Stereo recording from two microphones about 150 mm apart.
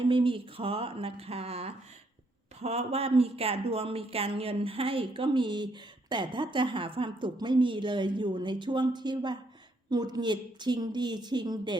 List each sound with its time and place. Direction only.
0.0 s speech: 35° right (ahead or behind)